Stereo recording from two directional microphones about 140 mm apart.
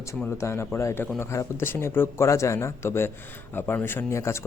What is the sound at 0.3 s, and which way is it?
Speech, 20° left (ahead or behind).